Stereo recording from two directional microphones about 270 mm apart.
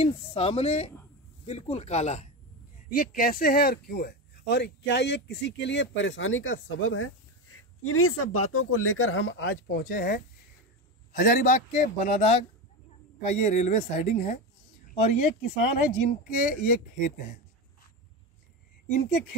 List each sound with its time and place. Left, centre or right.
0.0 s a man's voice: left